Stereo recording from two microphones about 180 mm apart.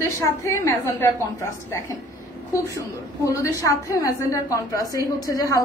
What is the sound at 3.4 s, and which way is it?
A woman's voice, 15° left (ahead or behind).